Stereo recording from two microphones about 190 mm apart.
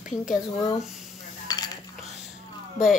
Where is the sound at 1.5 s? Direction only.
20° left (ahead or behind).